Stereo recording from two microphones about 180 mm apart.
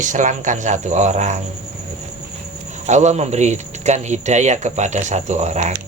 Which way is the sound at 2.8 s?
40° right (ahead or behind).